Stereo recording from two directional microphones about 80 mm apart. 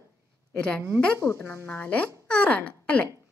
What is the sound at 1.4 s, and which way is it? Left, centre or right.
Speech, left.